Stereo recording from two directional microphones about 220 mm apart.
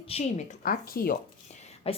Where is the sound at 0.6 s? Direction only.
40° left (ahead or behind).